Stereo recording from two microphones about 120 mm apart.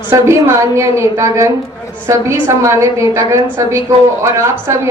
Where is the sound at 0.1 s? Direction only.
20° right (ahead or behind).